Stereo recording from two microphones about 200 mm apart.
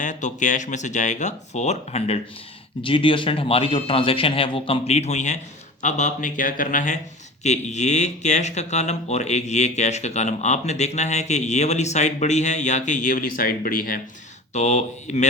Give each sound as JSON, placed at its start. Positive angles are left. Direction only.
{"t": 0.0, "sound": "speech", "side_deg": 40}